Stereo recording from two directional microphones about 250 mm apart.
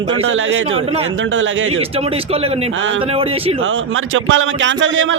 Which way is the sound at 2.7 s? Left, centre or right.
Right.